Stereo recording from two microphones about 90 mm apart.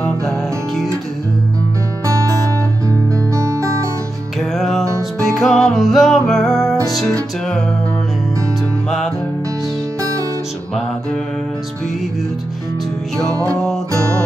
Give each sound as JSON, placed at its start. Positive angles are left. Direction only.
{"t": 2.0, "sound": "music", "side_deg": -35}
{"t": 4.4, "sound": "music", "side_deg": 5}
{"t": 13.6, "sound": "music", "side_deg": 10}